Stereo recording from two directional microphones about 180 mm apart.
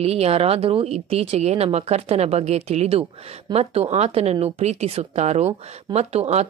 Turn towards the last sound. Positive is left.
turn(degrees=-35)  # may be behind; listen again after turning